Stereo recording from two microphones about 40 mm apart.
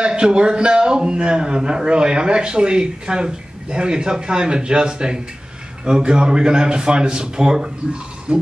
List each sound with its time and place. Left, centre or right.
0.0 s a man's voice: right